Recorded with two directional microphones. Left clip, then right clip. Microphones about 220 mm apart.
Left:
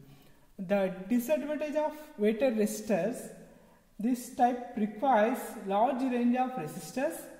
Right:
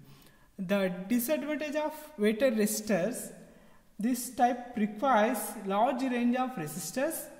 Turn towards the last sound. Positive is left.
turn(degrees=-45)  # may be behind; listen again after turning